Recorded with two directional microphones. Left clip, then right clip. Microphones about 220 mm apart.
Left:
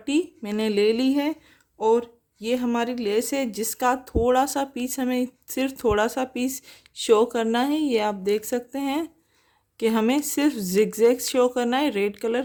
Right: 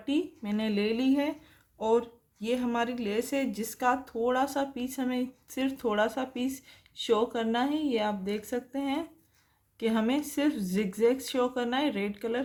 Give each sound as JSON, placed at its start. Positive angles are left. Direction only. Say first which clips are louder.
{"t": 0.0, "sound": "speech", "louder": "left 6 dB", "side_deg": 50}